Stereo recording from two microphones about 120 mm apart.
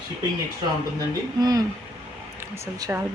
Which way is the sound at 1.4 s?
30° right (ahead or behind).